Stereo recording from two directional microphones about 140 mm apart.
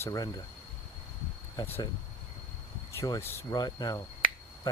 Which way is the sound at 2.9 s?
25° left (ahead or behind).